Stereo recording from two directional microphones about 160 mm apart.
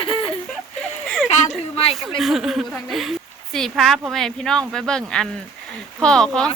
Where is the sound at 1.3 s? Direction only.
45° left (ahead or behind).